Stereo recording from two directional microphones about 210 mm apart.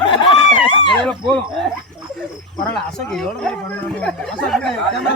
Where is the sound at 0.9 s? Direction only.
5° left (ahead or behind).